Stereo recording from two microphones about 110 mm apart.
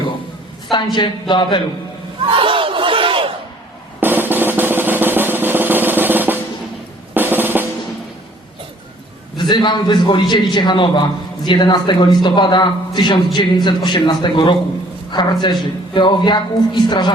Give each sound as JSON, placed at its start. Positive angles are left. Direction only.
{"t": 0.7, "sound": "a man's voice", "side_deg": 45}
{"t": 2.3, "sound": "battle cry", "side_deg": -55}
{"t": 4.0, "sound": "drum", "side_deg": -20}
{"t": 9.4, "sound": "a man's voice", "side_deg": 45}